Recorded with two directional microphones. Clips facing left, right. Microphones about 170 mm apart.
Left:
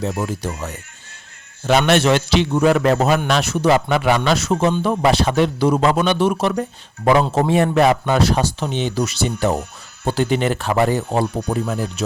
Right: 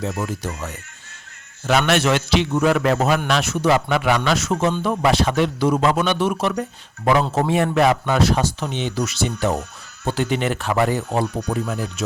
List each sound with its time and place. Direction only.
0.0 s a man's voice: 30° left (ahead or behind)
1.9 s a man's voice: 30° left (ahead or behind)